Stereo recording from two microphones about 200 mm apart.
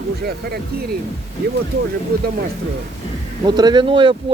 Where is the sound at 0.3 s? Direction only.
50° right (ahead or behind).